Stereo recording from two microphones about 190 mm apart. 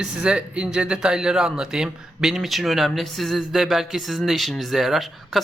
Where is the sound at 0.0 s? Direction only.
5° right (ahead or behind).